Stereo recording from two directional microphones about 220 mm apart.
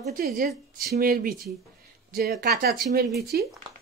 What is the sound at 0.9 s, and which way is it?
Speech, 40° right (ahead or behind).